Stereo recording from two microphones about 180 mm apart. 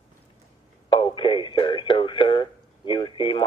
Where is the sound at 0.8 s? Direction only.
25° left (ahead or behind).